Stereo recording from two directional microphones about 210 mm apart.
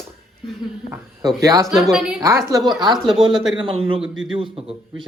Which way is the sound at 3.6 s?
25° right (ahead or behind).